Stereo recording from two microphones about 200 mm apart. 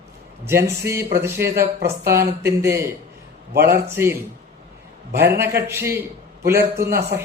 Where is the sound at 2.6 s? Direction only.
15° right (ahead or behind).